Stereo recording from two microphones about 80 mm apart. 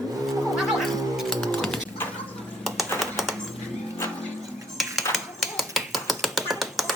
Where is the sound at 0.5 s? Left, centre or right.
Centre.